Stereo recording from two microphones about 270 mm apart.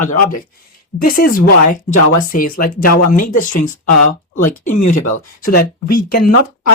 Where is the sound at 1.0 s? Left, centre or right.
Left.